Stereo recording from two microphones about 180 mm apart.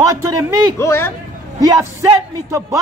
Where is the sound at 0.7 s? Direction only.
15° left (ahead or behind).